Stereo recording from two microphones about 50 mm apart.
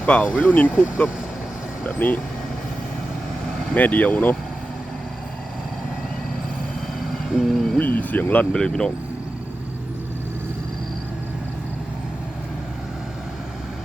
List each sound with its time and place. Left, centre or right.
0.0 s speech: left
3.8 s speech: left
7.0 s hoot: centre
7.8 s speech: left
8.5 s speech: centre